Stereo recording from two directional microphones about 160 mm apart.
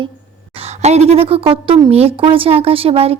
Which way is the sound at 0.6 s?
45° right (ahead or behind).